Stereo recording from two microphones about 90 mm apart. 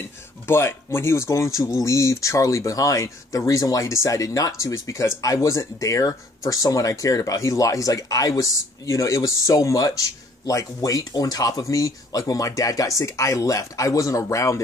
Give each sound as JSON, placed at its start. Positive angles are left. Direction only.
{"t": 0.5, "sound": "speech", "side_deg": 25}